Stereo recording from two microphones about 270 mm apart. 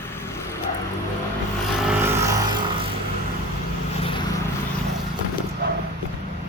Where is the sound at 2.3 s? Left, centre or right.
Centre.